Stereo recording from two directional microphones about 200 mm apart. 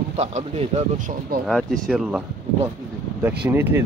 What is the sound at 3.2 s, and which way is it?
Speech, 10° right (ahead or behind).